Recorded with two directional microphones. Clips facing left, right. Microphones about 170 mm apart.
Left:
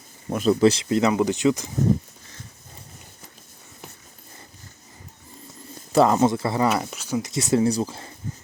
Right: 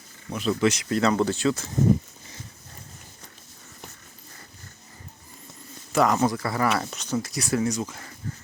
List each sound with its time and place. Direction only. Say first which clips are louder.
0.3 s speech: left 6 dB; 45° left (ahead or behind)
0.6 s speech: left 2 dB; 30° left (ahead or behind)
5.9 s speech: left 4 dB; 30° left (ahead or behind)
6.8 s speech: left 1 dB; 5° left (ahead or behind)
7.2 s speech: left 5 dB; 20° left (ahead or behind)